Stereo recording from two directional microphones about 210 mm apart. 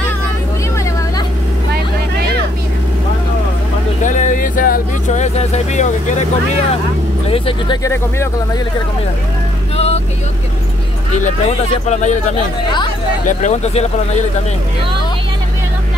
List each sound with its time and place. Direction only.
4.0 s vehicle: 35° left (ahead or behind)
7.2 s speech: 25° left (ahead or behind)
9.8 s vehicle: 30° left (ahead or behind)
11.2 s speech: 35° left (ahead or behind)
13.3 s speech: 35° left (ahead or behind)